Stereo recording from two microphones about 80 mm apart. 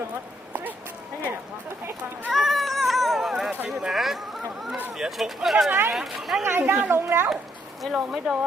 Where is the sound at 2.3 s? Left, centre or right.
Centre.